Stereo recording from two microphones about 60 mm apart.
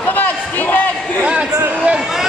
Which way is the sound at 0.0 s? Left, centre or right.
Left.